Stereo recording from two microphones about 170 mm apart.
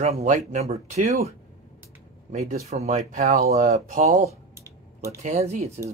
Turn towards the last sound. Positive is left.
turn(degrees=-40)  # may be behind; listen again after turning